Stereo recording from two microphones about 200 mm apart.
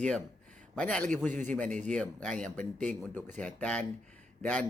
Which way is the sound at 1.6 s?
35° right (ahead or behind).